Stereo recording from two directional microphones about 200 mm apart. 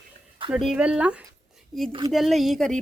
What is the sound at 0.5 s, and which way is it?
Speech, 5° right (ahead or behind).